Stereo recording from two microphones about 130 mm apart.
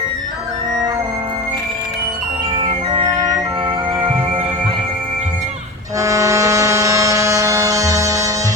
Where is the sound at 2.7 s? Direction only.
40° right (ahead or behind).